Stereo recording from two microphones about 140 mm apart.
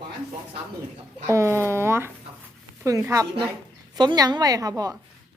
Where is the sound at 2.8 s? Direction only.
25° right (ahead or behind).